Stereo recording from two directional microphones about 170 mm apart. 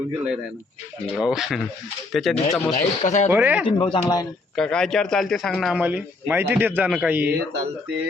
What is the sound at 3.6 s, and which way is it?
Speech, 30° left (ahead or behind).